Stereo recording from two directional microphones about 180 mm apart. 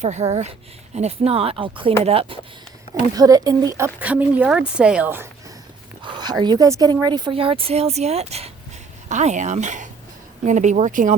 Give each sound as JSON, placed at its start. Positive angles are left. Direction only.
{"t": 0.0, "sound": "speech", "side_deg": -40}
{"t": 2.9, "sound": "speech", "side_deg": -20}
{"t": 6.1, "sound": "speech", "side_deg": -25}